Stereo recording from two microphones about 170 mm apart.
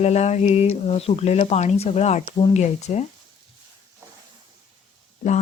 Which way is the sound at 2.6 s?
40° left (ahead or behind).